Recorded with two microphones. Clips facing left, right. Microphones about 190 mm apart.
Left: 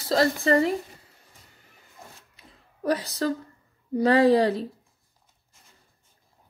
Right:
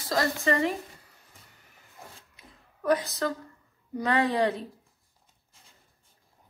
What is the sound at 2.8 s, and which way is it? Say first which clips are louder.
Speech: left 1 dB; 35° left (ahead or behind).